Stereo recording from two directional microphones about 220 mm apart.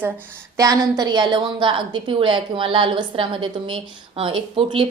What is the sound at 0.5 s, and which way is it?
A woman's voice, 15° right (ahead or behind).